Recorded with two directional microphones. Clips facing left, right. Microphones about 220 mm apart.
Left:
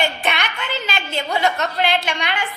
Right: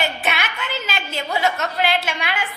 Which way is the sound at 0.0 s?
5° right (ahead or behind).